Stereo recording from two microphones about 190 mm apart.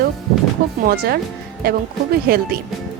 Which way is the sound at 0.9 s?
55° right (ahead or behind).